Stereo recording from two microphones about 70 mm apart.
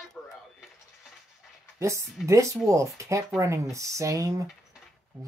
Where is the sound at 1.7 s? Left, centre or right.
Right.